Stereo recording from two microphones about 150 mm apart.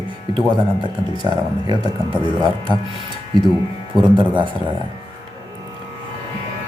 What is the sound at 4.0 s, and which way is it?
Speech, 35° right (ahead or behind).